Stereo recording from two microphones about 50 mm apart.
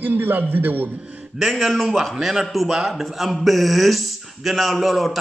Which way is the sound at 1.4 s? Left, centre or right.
Centre.